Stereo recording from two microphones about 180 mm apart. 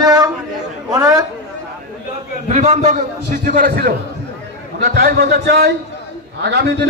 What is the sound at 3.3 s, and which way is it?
A man's voice, 55° right (ahead or behind).